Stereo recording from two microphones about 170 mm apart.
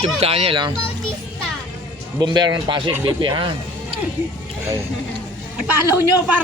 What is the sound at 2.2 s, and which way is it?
Speech, 25° right (ahead or behind).